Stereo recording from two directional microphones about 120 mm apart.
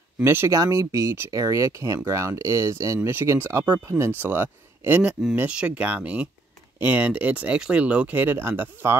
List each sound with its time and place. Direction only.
0.2 s speech: 20° right (ahead or behind)